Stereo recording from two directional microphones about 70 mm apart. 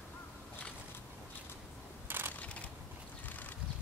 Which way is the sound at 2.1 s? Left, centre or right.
Right.